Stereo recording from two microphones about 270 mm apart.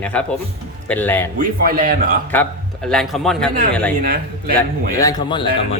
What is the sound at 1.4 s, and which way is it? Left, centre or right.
Speech, right.